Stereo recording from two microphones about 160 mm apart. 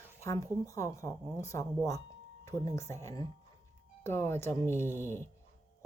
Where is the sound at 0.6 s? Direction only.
20° left (ahead or behind).